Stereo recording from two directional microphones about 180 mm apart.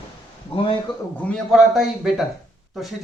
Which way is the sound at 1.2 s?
5° left (ahead or behind).